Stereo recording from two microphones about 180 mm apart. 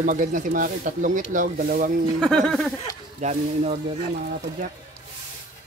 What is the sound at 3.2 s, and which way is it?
Speech, 40° right (ahead or behind).